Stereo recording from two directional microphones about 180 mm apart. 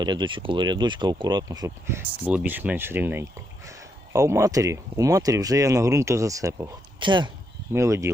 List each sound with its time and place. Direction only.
0.0 s speech: 25° right (ahead or behind)
7.7 s speech: 15° right (ahead or behind)